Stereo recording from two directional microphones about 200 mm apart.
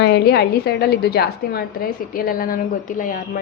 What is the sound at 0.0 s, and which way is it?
A woman's voice, 55° left (ahead or behind).